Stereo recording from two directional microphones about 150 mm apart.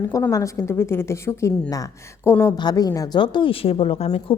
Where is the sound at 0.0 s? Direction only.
20° left (ahead or behind).